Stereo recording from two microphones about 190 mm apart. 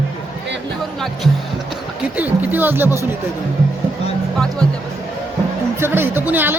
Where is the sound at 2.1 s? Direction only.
10° right (ahead or behind).